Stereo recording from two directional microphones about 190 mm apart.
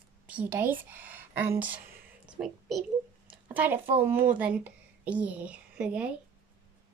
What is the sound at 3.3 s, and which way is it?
Speech, 10° right (ahead or behind).